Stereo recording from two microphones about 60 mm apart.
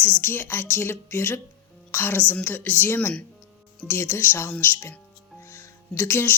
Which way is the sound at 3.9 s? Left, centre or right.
Left.